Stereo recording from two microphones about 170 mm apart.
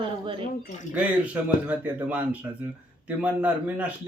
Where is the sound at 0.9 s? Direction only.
10° right (ahead or behind).